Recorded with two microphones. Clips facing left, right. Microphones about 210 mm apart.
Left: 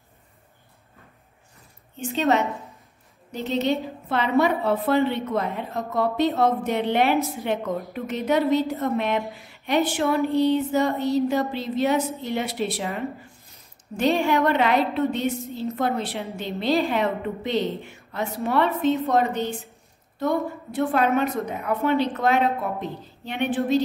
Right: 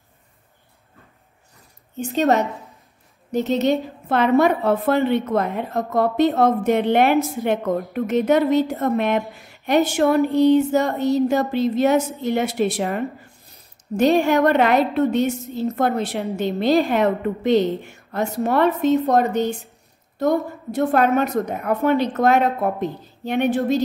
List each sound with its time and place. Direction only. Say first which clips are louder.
2.1 s a woman's voice: right 3 dB; 45° right (ahead or behind)
13.9 s a woman's voice: right 5 dB; 45° right (ahead or behind)